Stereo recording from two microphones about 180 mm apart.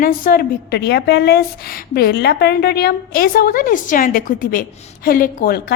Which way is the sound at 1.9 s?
55° left (ahead or behind).